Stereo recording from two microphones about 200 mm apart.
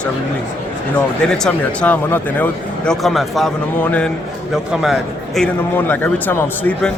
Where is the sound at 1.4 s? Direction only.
5° left (ahead or behind).